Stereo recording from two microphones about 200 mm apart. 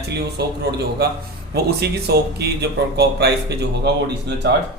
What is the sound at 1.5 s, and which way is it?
Speech, 55° right (ahead or behind).